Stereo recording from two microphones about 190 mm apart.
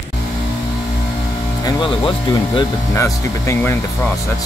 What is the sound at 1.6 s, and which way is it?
Speech, 25° left (ahead or behind).